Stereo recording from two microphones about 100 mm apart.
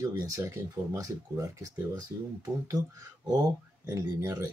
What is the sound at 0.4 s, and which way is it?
Speech, 30° right (ahead or behind).